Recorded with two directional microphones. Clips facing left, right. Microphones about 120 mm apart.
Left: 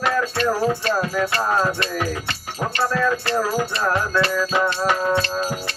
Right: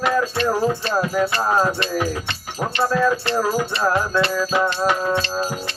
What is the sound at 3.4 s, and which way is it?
Music, centre (ahead or behind).